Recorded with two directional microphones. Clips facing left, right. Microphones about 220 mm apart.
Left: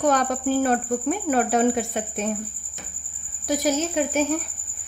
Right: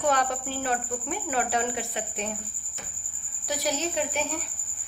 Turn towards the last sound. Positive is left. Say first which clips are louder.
# left 6 dB
turn(degrees=45)  # may be behind; listen again after turning